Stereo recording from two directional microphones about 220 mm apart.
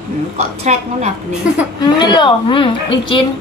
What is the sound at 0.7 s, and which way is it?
Speech, 30° right (ahead or behind).